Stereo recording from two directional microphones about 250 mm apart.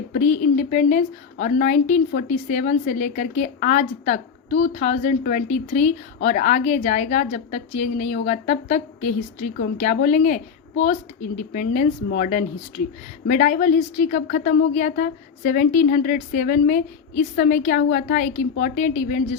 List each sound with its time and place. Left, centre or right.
0.1 s a woman's voice: left